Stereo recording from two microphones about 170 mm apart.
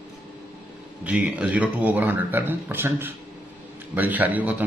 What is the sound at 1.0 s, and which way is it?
Speech, 5° right (ahead or behind).